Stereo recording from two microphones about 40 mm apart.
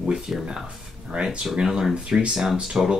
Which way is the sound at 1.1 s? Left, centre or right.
Right.